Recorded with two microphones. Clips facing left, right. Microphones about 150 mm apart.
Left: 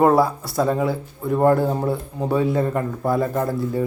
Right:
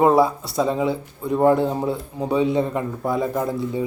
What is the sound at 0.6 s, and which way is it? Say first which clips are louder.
Speech: left 1 dB; 20° right (ahead or behind).